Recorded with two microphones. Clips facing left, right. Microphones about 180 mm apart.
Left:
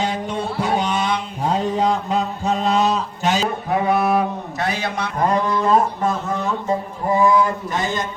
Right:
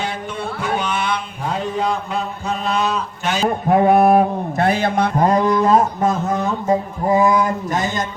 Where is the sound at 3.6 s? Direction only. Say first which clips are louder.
Right 8 dB; 50° right (ahead or behind).